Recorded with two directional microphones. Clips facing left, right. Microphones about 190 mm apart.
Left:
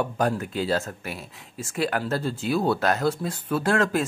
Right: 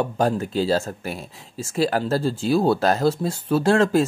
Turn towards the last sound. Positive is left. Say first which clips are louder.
# right 5 dB
turn(degrees=-30)  # may be behind; listen again after turning